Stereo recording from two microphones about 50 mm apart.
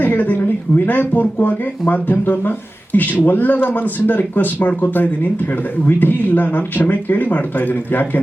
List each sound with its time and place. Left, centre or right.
0.0 s speech: left